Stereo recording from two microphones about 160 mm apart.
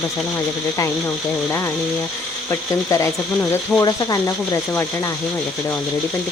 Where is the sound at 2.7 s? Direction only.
20° left (ahead or behind).